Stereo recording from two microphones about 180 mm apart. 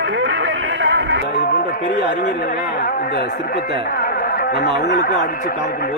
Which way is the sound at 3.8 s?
55° left (ahead or behind).